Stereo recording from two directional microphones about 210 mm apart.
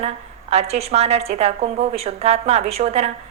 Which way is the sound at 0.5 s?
30° right (ahead or behind).